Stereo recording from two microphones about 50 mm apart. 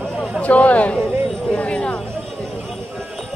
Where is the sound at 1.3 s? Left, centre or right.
Centre.